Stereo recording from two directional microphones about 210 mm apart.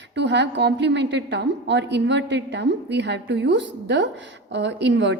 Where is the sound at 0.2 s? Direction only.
55° right (ahead or behind).